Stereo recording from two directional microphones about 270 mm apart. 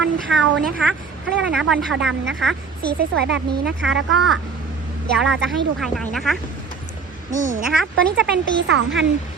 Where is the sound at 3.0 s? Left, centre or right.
Right.